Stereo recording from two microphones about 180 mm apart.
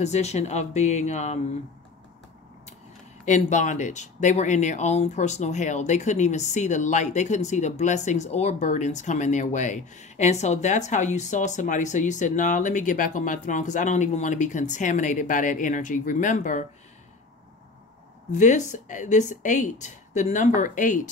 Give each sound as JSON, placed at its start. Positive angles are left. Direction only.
{"t": 0.0, "sound": "speech", "side_deg": 40}
{"t": 3.3, "sound": "speech", "side_deg": 40}
{"t": 18.3, "sound": "speech", "side_deg": 45}